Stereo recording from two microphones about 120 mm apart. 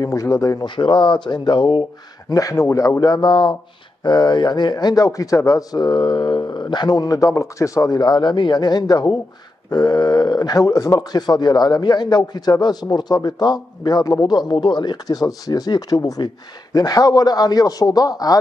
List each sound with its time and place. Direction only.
0.0 s speech: 25° left (ahead or behind)